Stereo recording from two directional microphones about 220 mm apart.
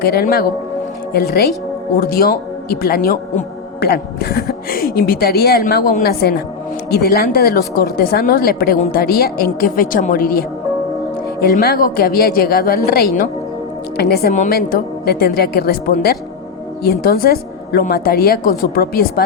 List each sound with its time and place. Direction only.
0.0 s speech: 45° left (ahead or behind)